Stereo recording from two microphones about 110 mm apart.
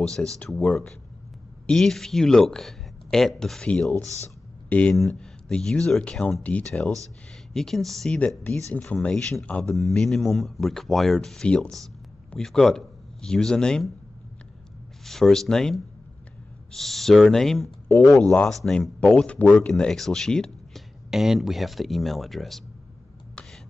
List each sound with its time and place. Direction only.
0.0 s speech: 5° left (ahead or behind)
3.9 s a man's voice: 30° right (ahead or behind)
4.6 s speech: 10° left (ahead or behind)
15.0 s speech: 5° left (ahead or behind)